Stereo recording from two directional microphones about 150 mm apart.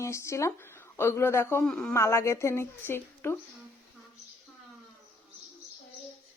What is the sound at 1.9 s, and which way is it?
Speech, 20° left (ahead or behind).